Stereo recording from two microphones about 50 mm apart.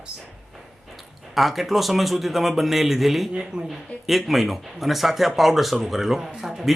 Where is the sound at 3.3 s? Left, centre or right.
Centre.